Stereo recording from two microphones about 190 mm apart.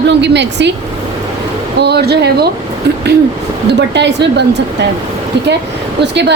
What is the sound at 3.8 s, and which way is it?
Speech, 65° right (ahead or behind).